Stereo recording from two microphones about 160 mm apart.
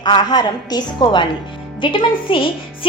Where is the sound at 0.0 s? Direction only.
25° left (ahead or behind).